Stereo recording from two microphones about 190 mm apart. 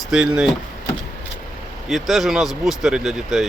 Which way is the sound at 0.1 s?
5° right (ahead or behind).